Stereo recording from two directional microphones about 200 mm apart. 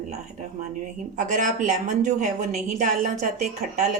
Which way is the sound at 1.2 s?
40° right (ahead or behind).